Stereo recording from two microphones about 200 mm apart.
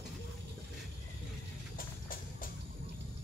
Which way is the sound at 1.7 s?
45° left (ahead or behind).